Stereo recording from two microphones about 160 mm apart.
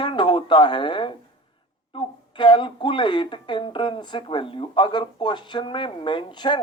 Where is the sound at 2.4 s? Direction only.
30° left (ahead or behind).